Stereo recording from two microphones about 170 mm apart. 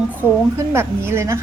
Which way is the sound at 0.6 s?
15° right (ahead or behind).